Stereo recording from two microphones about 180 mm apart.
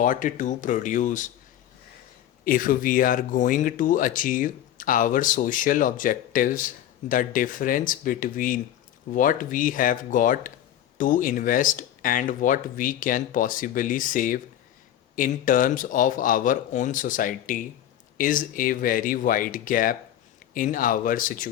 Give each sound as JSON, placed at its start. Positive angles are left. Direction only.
{"t": 0.0, "sound": "speech", "side_deg": 45}
{"t": 2.4, "sound": "speech", "side_deg": 50}